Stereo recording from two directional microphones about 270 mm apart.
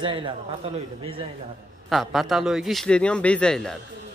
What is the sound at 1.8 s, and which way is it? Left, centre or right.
A man's voice, centre.